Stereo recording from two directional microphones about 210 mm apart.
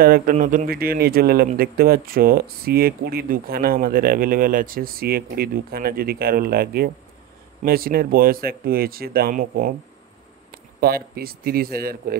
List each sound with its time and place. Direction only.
0.0 s speech: 45° right (ahead or behind)
10.5 s a sound: 45° right (ahead or behind)
11.1 s speech: 45° right (ahead or behind)